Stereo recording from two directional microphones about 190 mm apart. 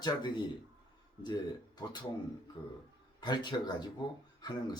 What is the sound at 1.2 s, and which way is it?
Speech, 25° left (ahead or behind).